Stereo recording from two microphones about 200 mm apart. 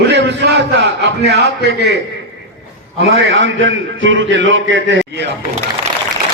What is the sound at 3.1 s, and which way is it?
A man's voice, 75° right (ahead or behind).